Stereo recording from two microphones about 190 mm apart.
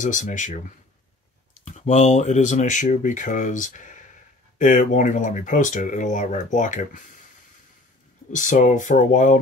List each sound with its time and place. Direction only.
0.0 s speech: 40° left (ahead or behind)
8.3 s speech: 40° left (ahead or behind)